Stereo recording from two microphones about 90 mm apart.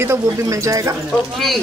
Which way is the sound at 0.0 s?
35° right (ahead or behind).